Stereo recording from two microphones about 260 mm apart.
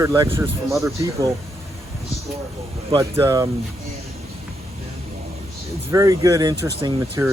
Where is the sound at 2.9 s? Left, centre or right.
Centre.